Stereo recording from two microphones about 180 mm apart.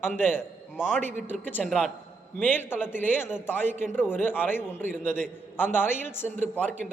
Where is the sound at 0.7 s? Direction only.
5° right (ahead or behind); by 3.3 s 10° left (ahead or behind).